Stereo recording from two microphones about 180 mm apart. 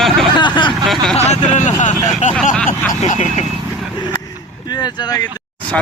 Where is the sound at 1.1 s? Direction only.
40° left (ahead or behind).